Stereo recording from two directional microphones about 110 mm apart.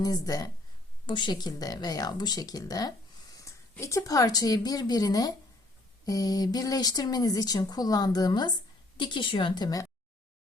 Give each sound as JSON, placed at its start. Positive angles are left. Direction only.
{"t": 0.0, "sound": "a woman's voice", "side_deg": 35}